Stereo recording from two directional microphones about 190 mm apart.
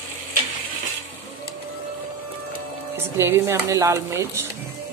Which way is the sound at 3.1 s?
15° right (ahead or behind).